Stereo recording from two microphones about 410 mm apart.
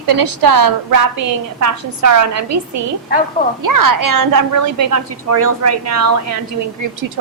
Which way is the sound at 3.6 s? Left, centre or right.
Right.